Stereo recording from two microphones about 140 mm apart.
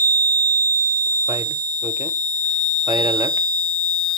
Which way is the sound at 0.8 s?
25° right (ahead or behind).